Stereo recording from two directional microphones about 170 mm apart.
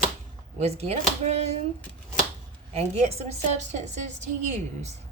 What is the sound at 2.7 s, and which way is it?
Speech, 35° right (ahead or behind).